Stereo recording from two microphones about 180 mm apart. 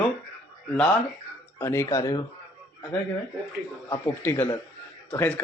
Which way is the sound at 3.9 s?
10° left (ahead or behind).